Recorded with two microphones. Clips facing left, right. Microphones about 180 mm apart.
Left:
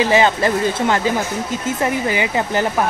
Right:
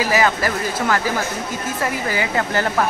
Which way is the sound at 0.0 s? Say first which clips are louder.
Left 4 dB; 25° left (ahead or behind).